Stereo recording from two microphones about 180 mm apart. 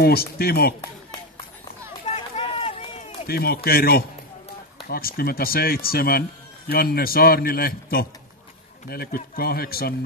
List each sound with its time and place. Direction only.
0.0 s speech: 60° left (ahead or behind)
2.0 s run: 40° left (ahead or behind)
3.3 s speech: 60° left (ahead or behind)